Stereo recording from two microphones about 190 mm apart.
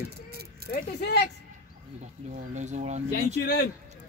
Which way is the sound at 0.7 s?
60° left (ahead or behind).